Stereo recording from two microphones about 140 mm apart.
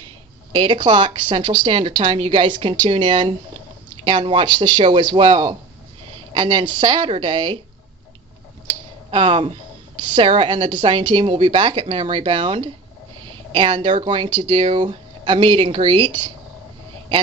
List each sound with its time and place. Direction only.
0.6 s speech: 35° right (ahead or behind)
8.6 s speech: 40° right (ahead or behind)
14.5 s speech: 45° right (ahead or behind)